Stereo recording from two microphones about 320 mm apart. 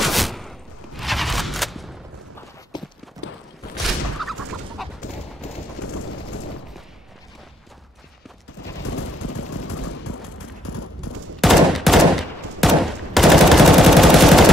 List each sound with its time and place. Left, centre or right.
0.0 s a sound: centre
2.7 s clip-clop: centre
3.2 s walk: left
4.2 s chicken: centre
9.2 s machine gun: left
11.4 s gunshot: centre